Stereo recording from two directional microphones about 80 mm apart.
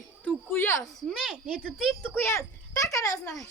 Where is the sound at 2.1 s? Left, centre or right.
Left.